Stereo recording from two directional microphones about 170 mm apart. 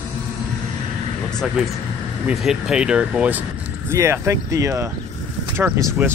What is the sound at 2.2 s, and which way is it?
Speech, 5° right (ahead or behind).